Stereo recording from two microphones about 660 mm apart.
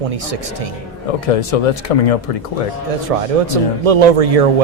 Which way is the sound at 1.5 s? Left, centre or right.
Left.